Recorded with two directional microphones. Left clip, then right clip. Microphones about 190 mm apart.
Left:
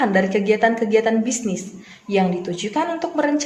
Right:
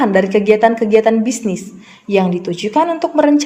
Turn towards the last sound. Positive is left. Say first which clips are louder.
# right 8 dB
turn(degrees=-40)  # may be behind; listen again after turning